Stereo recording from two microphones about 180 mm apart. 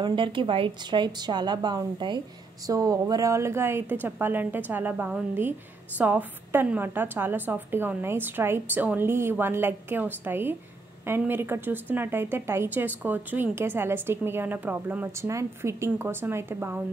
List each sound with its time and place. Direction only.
0.0 s a woman's voice: 25° right (ahead or behind)